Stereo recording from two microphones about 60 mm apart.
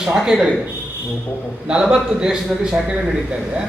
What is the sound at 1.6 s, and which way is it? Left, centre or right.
Speech, centre.